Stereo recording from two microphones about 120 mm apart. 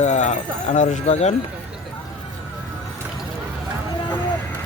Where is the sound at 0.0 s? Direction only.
75° left (ahead or behind).